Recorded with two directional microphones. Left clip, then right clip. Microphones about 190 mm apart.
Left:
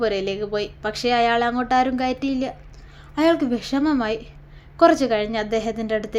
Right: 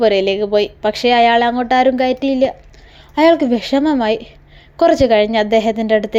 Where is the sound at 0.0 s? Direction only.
30° right (ahead or behind).